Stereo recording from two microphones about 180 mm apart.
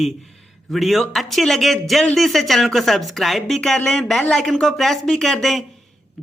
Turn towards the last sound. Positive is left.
turn(degrees=0)  # may be behind; listen again after turning